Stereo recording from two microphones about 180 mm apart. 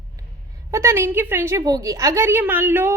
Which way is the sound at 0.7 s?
15° right (ahead or behind).